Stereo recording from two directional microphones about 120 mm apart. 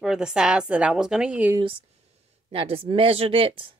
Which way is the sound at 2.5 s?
50° right (ahead or behind).